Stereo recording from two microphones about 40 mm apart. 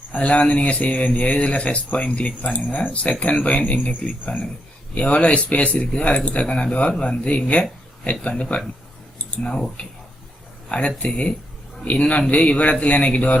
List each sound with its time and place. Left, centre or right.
0.1 s speech: left
9.8 s speech: left